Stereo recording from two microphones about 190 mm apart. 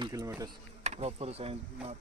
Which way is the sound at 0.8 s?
30° right (ahead or behind).